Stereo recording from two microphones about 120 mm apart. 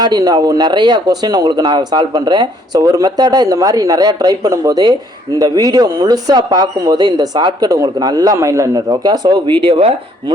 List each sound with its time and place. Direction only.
0.0 s speech: 35° right (ahead or behind)
9.6 s speech: 45° right (ahead or behind)